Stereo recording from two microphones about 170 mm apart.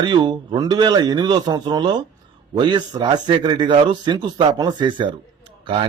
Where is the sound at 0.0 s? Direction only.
25° right (ahead or behind).